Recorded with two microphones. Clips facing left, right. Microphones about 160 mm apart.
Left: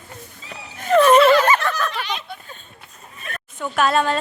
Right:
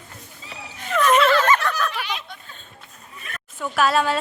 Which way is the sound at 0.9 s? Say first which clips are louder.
Left 6 dB; 30° left (ahead or behind).